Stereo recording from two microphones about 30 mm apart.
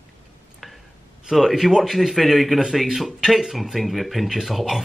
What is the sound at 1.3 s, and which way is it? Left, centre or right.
Speech, centre.